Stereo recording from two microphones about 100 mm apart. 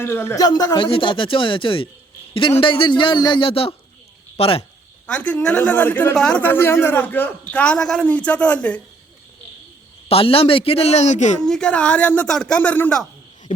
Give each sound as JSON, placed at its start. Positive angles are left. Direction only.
{"t": 0.0, "sound": "speech", "side_deg": 25}
{"t": 0.3, "sound": "speech", "side_deg": 40}
{"t": 0.8, "sound": "speech", "side_deg": 60}
{"t": 3.5, "sound": "a man's voice", "side_deg": 75}
{"t": 5.0, "sound": "a man's voice", "side_deg": 15}
{"t": 6.1, "sound": "a man's voice", "side_deg": 5}
{"t": 6.4, "sound": "a man's voice", "side_deg": 20}
{"t": 10.1, "sound": "a man's voice", "side_deg": 70}
{"t": 11.4, "sound": "a man's voice", "side_deg": 5}